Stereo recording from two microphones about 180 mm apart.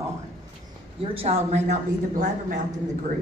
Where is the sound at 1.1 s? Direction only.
35° right (ahead or behind).